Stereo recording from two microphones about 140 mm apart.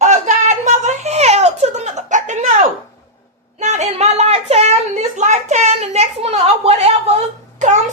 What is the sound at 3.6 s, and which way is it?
A woman's voice, 55° right (ahead or behind).